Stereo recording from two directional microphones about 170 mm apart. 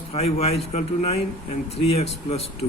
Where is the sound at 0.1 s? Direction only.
35° left (ahead or behind).